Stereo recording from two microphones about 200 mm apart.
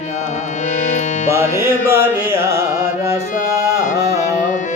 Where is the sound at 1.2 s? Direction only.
15° right (ahead or behind).